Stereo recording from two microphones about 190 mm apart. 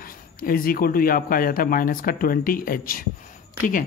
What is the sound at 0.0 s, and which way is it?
Speech, 50° left (ahead or behind).